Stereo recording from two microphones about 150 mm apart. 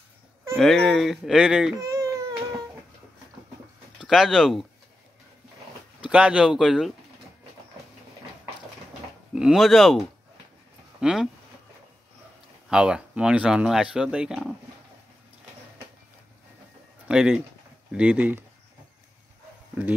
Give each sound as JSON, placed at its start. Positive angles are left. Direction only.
{"t": 0.6, "sound": "speech", "side_deg": 5}
{"t": 1.8, "sound": "baby cry", "side_deg": -20}
{"t": 4.0, "sound": "speech", "side_deg": 0}
{"t": 6.0, "sound": "speech", "side_deg": -5}
{"t": 9.3, "sound": "speech", "side_deg": -5}
{"t": 12.6, "sound": "speech", "side_deg": -5}
{"t": 17.1, "sound": "speech", "side_deg": -5}